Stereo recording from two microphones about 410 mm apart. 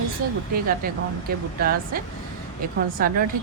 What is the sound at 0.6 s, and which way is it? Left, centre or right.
Speech, right.